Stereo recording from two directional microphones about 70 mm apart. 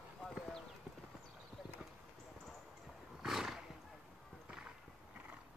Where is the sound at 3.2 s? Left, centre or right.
Centre.